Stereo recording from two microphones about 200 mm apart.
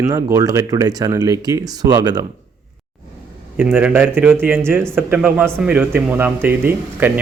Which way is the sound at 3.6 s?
10° right (ahead or behind).